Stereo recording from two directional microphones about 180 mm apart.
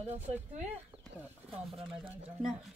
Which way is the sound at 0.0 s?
35° right (ahead or behind).